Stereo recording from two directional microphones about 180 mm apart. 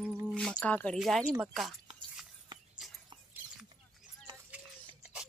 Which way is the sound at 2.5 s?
25° right (ahead or behind).